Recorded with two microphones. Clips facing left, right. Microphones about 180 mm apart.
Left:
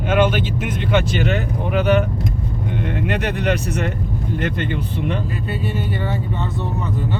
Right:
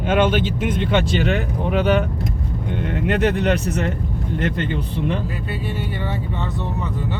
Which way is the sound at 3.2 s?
30° right (ahead or behind).